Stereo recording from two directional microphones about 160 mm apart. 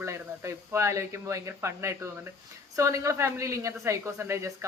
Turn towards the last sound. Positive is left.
turn(degrees=-15)  # may be behind; listen again after turning